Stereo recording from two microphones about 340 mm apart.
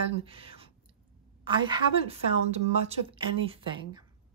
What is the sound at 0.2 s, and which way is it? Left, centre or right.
Speech, centre.